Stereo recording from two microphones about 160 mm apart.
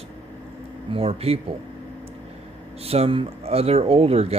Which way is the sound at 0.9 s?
40° right (ahead or behind).